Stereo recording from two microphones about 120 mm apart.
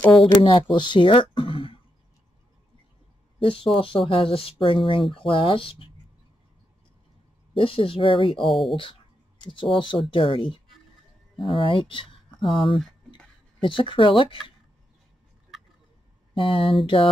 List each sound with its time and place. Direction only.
0.0 s speech: centre (ahead or behind)
0.4 s speech: 45° left (ahead or behind)
3.3 s speech: 50° left (ahead or behind)
7.5 s speech: 45° left (ahead or behind)
8.4 s speech: centre (ahead or behind)
9.4 s speech: 45° left (ahead or behind)
13.6 s speech: 45° left (ahead or behind)
16.3 s speech: 45° left (ahead or behind)